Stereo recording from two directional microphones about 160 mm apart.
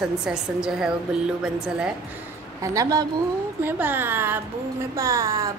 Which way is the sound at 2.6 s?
20° right (ahead or behind).